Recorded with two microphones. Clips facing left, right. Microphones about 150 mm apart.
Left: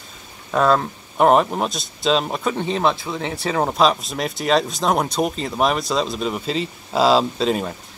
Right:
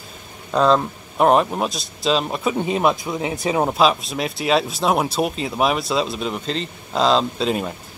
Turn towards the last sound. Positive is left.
turn(degrees=0)  # may be behind; listen again after turning